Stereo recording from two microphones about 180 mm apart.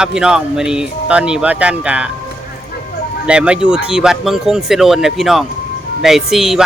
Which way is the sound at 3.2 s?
5° right (ahead or behind).